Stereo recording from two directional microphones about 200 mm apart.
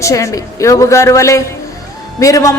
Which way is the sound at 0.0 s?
15° left (ahead or behind).